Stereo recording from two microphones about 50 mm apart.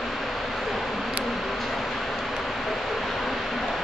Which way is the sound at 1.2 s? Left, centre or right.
Centre.